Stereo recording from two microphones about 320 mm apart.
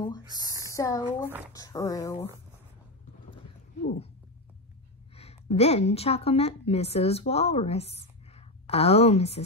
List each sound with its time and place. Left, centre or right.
0.7 s speech: centre
3.8 s speech: left
5.1 s a woman's voice: centre